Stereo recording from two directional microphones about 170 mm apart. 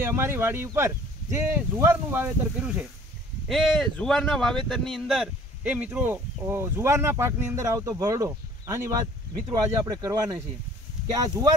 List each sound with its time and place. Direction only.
0.0 s speech: 15° right (ahead or behind)